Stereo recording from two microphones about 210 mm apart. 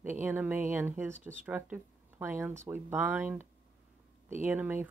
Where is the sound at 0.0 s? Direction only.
10° right (ahead or behind).